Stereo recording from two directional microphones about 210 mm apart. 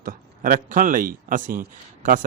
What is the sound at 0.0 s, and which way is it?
Speech, 40° right (ahead or behind).